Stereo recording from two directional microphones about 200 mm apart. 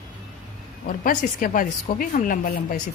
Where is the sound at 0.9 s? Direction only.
45° left (ahead or behind).